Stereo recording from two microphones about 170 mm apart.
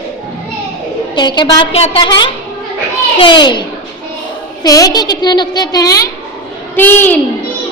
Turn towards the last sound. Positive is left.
turn(degrees=10)  # may be behind; listen again after turning